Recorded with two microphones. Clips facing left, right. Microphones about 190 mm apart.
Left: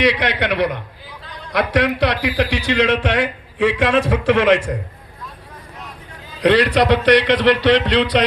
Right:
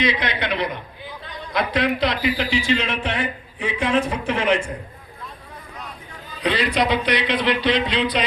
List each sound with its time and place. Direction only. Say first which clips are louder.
0.0 s a man's voice: left 5 dB; 75° left (ahead or behind)
6.4 s a man's voice: left 7 dB; 75° left (ahead or behind)